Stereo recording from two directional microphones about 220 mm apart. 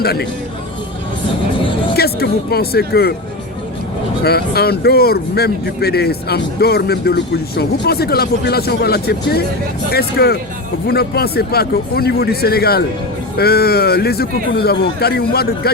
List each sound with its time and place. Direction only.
0.0 s speech: 45° left (ahead or behind)
2.0 s speech: 45° left (ahead or behind)
4.2 s speech: 45° left (ahead or behind)